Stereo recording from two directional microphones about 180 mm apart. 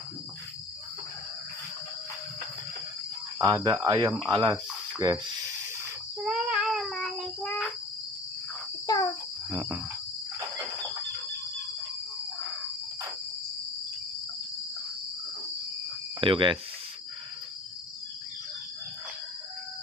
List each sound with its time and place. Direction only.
3.3 s speech: 25° right (ahead or behind)
6.2 s child singing: 5° right (ahead or behind)
8.8 s a sound: 20° left (ahead or behind)
16.2 s speech: 30° right (ahead or behind)